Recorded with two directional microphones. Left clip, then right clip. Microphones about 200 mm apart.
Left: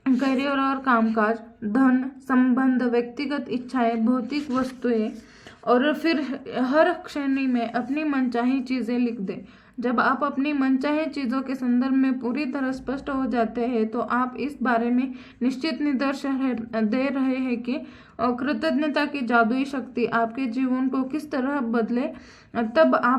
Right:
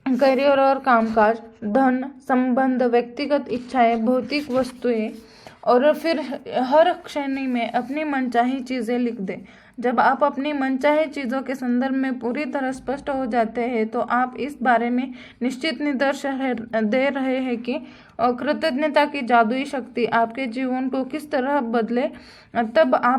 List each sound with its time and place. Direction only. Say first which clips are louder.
0.0 s a woman's voice: right 7 dB; 25° right (ahead or behind)